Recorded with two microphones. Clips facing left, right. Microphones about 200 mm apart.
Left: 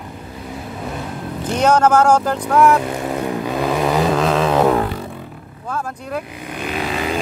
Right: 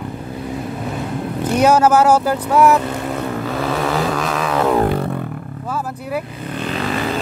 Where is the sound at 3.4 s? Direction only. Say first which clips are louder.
Left 2 dB; 20° left (ahead or behind).